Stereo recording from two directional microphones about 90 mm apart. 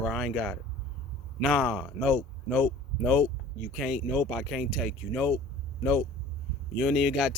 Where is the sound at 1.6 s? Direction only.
5° left (ahead or behind).